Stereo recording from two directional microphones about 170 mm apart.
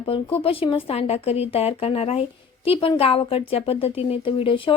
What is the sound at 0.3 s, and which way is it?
A child's voice, 30° left (ahead or behind).